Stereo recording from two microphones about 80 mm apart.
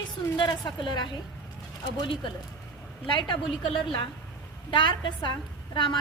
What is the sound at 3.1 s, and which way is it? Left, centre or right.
A woman's voice, left.